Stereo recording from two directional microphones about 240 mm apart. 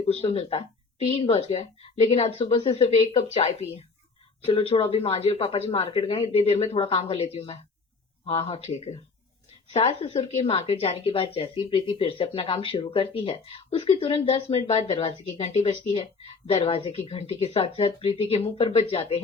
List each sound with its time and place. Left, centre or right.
0.0 s a woman's voice: left